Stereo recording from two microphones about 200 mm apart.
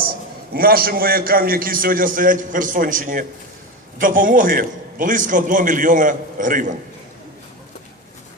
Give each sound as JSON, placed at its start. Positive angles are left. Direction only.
{"t": 0.0, "sound": "a man's voice", "side_deg": -45}